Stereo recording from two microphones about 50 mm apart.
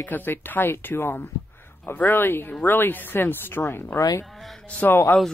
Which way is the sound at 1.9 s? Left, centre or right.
Left.